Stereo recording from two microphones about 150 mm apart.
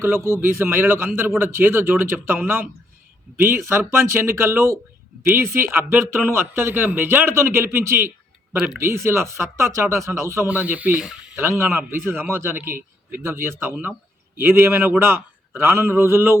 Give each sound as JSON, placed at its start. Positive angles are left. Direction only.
{"t": 0.3, "sound": "a man's voice", "side_deg": -15}
{"t": 8.5, "sound": "speech", "side_deg": -5}
{"t": 9.0, "sound": "a man's voice", "side_deg": -15}